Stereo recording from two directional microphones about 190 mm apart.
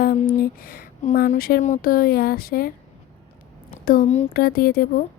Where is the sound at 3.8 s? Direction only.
45° left (ahead or behind).